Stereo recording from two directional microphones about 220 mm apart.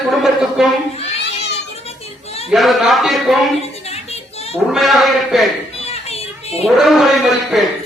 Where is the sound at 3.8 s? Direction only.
30° left (ahead or behind).